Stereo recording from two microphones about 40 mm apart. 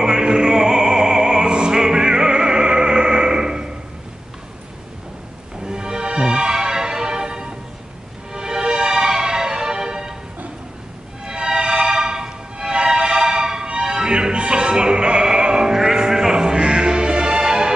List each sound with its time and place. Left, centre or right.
0.0 s opera: centre
5.6 s music: centre
11.2 s music: centre